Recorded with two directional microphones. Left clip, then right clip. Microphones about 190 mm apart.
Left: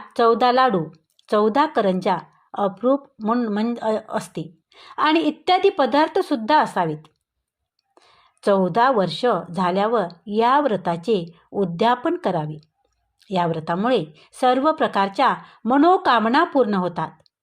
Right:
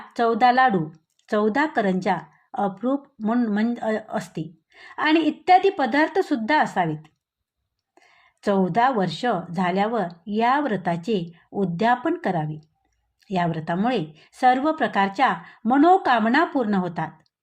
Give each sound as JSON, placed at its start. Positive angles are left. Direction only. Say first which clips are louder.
{"t": 0.1, "sound": "speech", "louder": "left 2 dB", "side_deg": 20}